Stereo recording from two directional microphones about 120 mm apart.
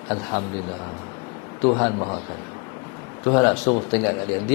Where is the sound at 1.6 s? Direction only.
25° left (ahead or behind).